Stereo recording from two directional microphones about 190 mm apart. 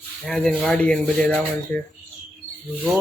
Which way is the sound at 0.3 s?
5° left (ahead or behind).